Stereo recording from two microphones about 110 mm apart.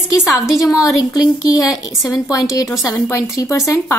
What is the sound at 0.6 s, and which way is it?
A woman's voice, 30° left (ahead or behind).